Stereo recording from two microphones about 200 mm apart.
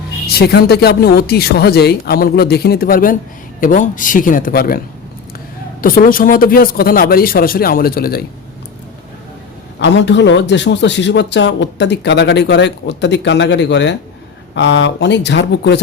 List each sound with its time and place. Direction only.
0.3 s speech: 55° left (ahead or behind)
5.8 s speech: 45° left (ahead or behind)
9.8 s a man's voice: 60° left (ahead or behind)